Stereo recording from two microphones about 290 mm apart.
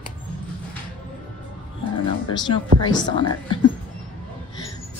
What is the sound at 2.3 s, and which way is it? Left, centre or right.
Speech, centre.